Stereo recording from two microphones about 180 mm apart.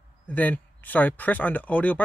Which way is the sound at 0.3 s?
10° left (ahead or behind).